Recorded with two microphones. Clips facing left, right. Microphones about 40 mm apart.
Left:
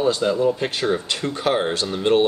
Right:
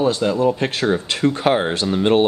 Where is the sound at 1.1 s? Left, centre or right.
Right.